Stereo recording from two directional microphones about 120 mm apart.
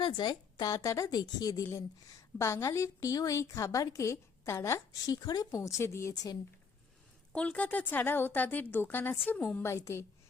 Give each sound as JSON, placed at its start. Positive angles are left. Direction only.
{"t": 0.0, "sound": "a woman's voice", "side_deg": 40}
{"t": 7.3, "sound": "a woman's voice", "side_deg": 10}
{"t": 9.6, "sound": "a woman's voice", "side_deg": 20}